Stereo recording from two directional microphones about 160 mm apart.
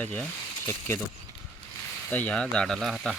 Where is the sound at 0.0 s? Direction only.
10° left (ahead or behind).